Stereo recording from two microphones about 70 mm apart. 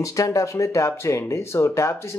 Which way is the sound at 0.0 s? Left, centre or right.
Left.